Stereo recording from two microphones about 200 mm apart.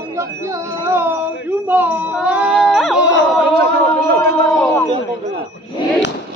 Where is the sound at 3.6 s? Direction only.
50° right (ahead or behind).